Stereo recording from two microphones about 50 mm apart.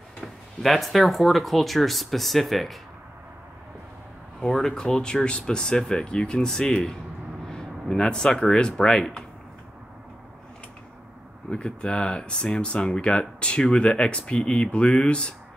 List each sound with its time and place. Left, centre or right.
0.2 s speech: centre
4.4 s speech: centre
11.5 s speech: centre